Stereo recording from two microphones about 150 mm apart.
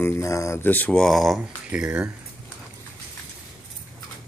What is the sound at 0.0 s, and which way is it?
Speech, 20° left (ahead or behind).